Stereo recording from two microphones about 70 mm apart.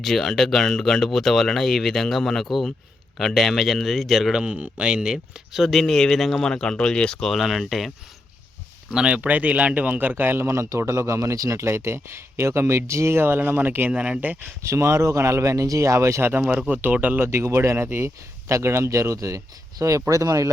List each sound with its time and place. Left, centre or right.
0.0 s speech: centre
7.3 s speech: centre
8.9 s speech: centre
13.9 s speech: centre
14.6 s speech: right
16.3 s speech: right
17.2 s speech: right